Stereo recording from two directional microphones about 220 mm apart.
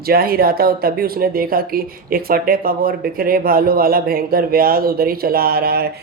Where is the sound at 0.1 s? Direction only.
40° right (ahead or behind).